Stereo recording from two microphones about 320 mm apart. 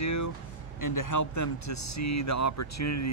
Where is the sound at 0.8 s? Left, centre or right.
Left.